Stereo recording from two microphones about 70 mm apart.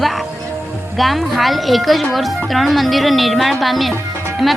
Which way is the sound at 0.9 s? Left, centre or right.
Centre.